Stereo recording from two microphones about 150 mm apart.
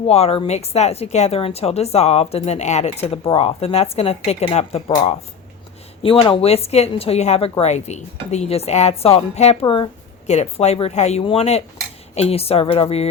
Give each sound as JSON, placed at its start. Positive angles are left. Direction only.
{"t": 0.1, "sound": "speech", "side_deg": 40}
{"t": 6.0, "sound": "speech", "side_deg": 40}
{"t": 10.2, "sound": "speech", "side_deg": 45}